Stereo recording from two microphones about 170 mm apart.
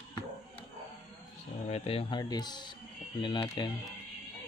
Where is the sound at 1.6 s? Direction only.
35° left (ahead or behind).